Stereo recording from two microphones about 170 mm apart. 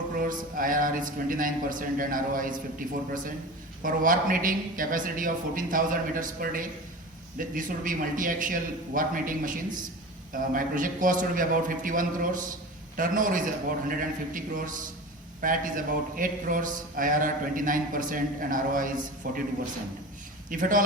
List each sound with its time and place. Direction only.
0.2 s a man's voice: 55° right (ahead or behind)
20.5 s a man's voice: 50° right (ahead or behind)